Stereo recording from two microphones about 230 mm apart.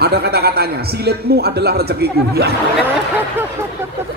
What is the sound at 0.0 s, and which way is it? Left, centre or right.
A man's voice, right.